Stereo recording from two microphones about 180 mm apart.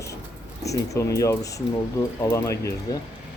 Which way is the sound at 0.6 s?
15° left (ahead or behind).